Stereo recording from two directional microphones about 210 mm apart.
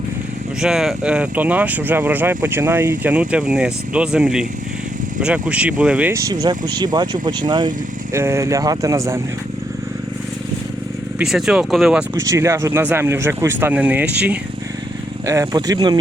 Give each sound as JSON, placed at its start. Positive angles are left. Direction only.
{"t": 0.6, "sound": "speech", "side_deg": -5}
{"t": 11.2, "sound": "speech", "side_deg": 0}